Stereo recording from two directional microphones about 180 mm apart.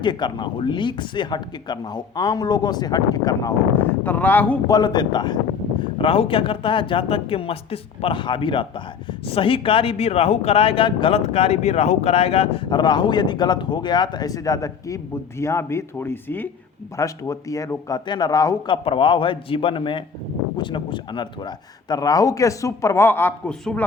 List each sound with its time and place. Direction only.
0.0 s speech: 25° left (ahead or behind)
4.7 s speech: 25° left (ahead or behind); by 23.8 s 5° left (ahead or behind)